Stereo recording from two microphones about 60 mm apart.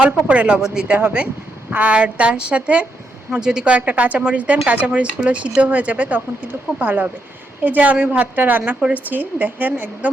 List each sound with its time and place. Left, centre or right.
0.0 s a man's voice: centre
0.9 s a man's voice: right